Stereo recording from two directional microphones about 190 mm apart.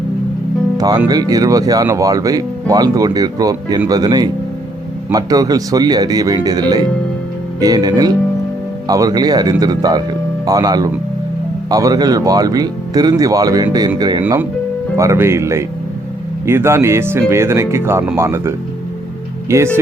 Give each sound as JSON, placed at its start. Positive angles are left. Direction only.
{"t": 0.8, "sound": "speech", "side_deg": -20}